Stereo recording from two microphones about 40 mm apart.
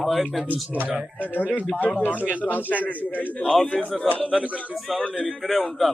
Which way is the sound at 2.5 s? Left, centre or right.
Left.